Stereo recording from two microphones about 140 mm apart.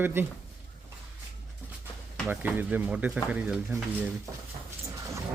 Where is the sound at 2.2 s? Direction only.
10° right (ahead or behind).